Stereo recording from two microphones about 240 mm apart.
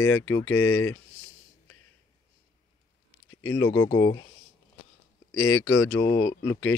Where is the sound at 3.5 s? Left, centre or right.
Centre.